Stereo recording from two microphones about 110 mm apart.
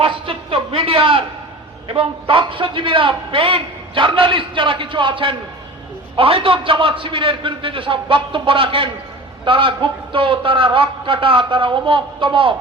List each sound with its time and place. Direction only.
0.0 s a man's voice: 55° right (ahead or behind)